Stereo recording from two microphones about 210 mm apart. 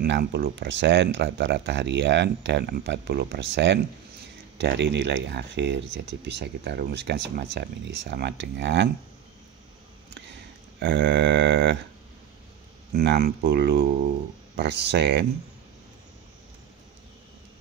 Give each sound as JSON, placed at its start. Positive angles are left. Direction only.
{"t": 0.0, "sound": "speech", "side_deg": -50}
{"t": 10.8, "sound": "speech", "side_deg": -55}
{"t": 12.9, "sound": "speech", "side_deg": -50}